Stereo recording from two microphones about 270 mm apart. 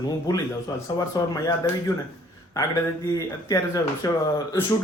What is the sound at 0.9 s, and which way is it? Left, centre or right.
Speech, centre.